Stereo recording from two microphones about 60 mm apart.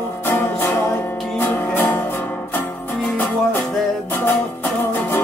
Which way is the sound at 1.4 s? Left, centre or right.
Left.